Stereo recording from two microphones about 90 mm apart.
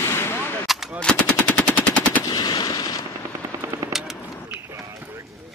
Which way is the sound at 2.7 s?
45° left (ahead or behind).